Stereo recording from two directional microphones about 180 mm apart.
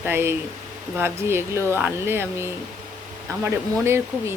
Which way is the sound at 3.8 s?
15° right (ahead or behind).